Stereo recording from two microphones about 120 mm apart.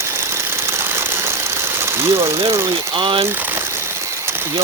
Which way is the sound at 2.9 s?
45° right (ahead or behind).